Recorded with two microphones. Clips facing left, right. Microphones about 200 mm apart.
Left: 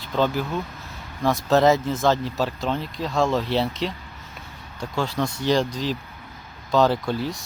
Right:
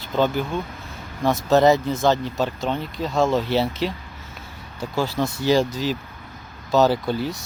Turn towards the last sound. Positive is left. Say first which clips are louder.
# right 2 dB
turn(degrees=0)  # may be behind; listen again after turning